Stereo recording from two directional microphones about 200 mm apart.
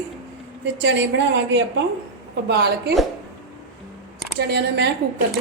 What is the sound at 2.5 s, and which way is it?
Speech, 55° right (ahead or behind).